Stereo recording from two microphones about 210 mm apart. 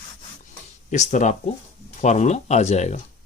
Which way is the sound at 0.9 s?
35° left (ahead or behind).